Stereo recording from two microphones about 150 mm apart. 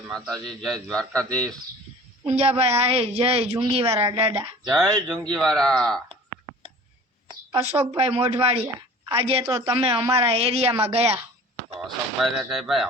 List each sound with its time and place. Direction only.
0.4 s speech: 5° left (ahead or behind)
2.2 s a woman's voice: 40° right (ahead or behind)
4.7 s speech: 5° left (ahead or behind)
7.6 s a woman's voice: 40° right (ahead or behind)
12.2 s speech: centre (ahead or behind)